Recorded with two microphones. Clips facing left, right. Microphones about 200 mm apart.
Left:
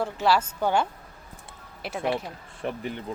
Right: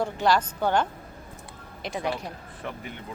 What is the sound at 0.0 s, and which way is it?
Speech, 5° left (ahead or behind).